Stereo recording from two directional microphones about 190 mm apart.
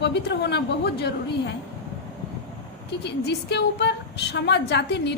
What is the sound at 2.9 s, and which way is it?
A woman's voice, 60° left (ahead or behind).